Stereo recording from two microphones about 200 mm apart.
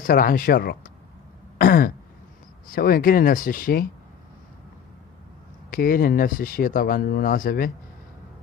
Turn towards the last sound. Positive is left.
turn(degrees=45)  # may be behind; listen again after turning